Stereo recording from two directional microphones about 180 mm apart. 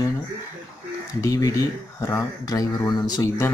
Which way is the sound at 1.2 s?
20° left (ahead or behind).